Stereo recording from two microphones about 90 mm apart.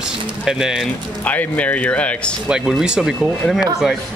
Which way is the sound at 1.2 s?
15° left (ahead or behind).